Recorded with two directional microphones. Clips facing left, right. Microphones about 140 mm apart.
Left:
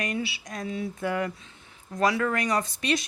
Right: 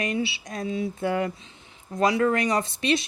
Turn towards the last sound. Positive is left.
turn(degrees=-25)  # may be behind; listen again after turning